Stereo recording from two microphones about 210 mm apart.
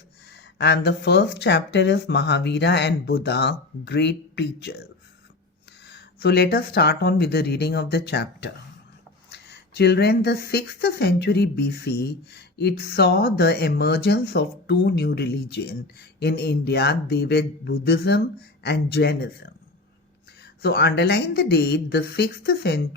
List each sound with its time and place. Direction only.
0.3 s speech: 55° left (ahead or behind)
20.6 s speech: 50° left (ahead or behind)